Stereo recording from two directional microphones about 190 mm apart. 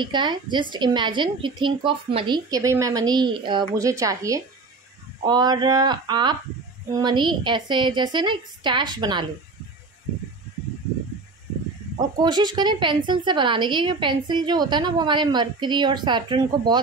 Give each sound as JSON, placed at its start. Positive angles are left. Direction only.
{"t": 0.0, "sound": "a woman's voice", "side_deg": -25}
{"t": 12.2, "sound": "a woman's voice", "side_deg": -20}